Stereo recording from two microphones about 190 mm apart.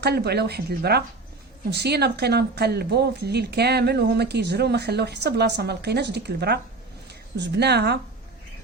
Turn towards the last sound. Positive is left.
turn(degrees=-60)  # may be behind; listen again after turning